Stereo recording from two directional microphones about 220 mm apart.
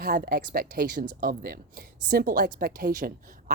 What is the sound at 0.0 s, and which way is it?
Speech, 45° right (ahead or behind).